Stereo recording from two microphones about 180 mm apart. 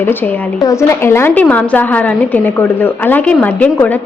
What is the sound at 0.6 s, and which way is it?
A woman's voice, 15° left (ahead or behind).